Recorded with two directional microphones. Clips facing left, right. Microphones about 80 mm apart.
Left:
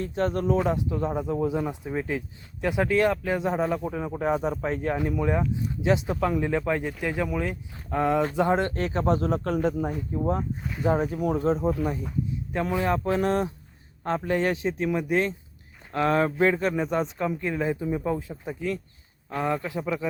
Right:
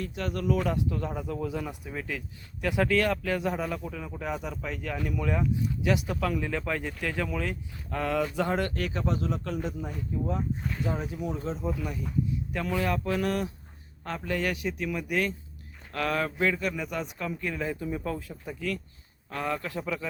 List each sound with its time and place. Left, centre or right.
0.0 s speech: left
4.9 s speech: left
10.6 s speech: centre
10.8 s speech: left; by 20.1 s centre